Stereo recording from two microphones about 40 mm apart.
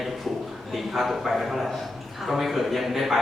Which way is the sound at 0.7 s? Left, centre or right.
Centre.